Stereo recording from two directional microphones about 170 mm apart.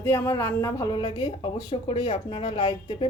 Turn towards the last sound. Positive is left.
turn(degrees=30)  # may be behind; listen again after turning